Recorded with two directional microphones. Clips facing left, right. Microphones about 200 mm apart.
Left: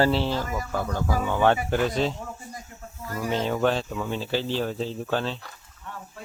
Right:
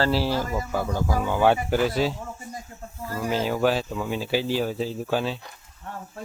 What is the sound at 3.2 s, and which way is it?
Speech, 5° right (ahead or behind).